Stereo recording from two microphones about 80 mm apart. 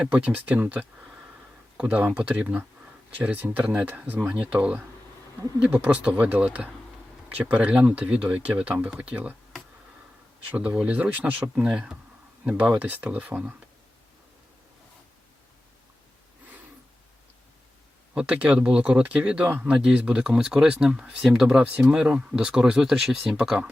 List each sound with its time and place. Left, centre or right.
0.1 s speech: centre
10.5 s speech: centre
18.1 s speech: centre